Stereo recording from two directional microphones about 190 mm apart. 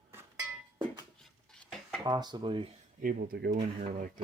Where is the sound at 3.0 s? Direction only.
50° right (ahead or behind).